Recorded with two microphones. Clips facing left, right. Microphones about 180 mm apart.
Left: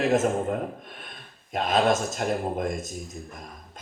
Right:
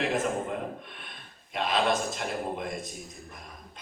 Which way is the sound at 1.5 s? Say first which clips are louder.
Left 4 dB; 45° left (ahead or behind).